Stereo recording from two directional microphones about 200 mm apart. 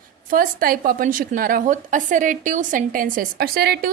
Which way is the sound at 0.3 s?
45° right (ahead or behind).